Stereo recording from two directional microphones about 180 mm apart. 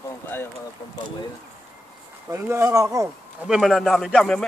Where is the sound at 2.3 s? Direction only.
15° right (ahead or behind).